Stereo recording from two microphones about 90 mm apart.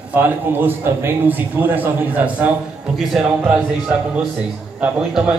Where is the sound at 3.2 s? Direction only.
5° right (ahead or behind).